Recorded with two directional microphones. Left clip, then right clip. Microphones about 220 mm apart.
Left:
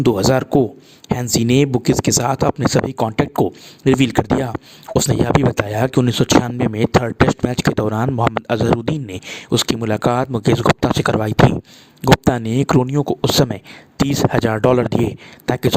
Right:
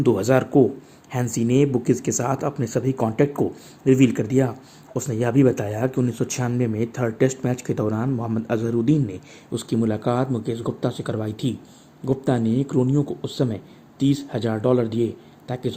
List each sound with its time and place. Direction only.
0.0 s speech: 60° left (ahead or behind)
1.2 s speech: 45° left (ahead or behind)